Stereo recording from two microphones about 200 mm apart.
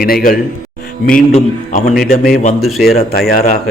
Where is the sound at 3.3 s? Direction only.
45° left (ahead or behind).